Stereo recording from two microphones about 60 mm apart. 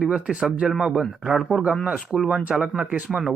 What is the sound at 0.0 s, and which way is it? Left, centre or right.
Speech, centre.